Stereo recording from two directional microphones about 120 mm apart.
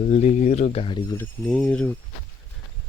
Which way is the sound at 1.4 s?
5° left (ahead or behind).